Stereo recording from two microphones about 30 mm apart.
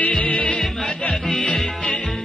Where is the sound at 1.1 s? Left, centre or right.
Centre.